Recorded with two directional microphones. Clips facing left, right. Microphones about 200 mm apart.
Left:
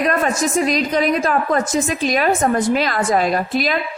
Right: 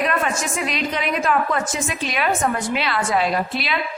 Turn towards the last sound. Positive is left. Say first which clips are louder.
# left 4 dB
turn(degrees=45)  # may be behind; listen again after turning